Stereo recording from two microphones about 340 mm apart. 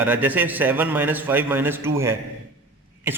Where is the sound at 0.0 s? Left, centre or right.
Centre.